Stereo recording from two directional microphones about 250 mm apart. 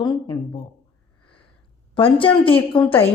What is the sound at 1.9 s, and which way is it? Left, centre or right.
Speech, left.